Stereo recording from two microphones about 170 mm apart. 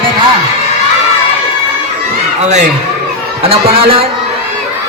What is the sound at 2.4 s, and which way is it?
A man's voice, 45° right (ahead or behind).